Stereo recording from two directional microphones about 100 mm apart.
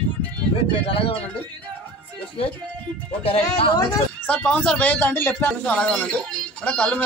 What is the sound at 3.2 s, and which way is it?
Speech, 70° left (ahead or behind).